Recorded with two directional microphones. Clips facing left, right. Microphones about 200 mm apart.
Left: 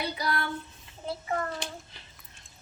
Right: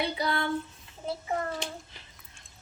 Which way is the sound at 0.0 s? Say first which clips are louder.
Right 2 dB; 25° right (ahead or behind).